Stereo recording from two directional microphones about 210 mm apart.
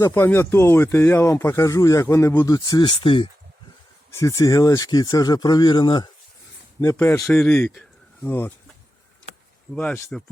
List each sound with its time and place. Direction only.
0.0 s speech: 10° left (ahead or behind)
6.8 s speech: 10° left (ahead or behind)
9.7 s speech: 5° left (ahead or behind)